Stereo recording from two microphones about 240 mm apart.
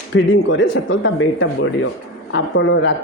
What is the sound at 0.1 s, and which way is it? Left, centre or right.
Speech, left.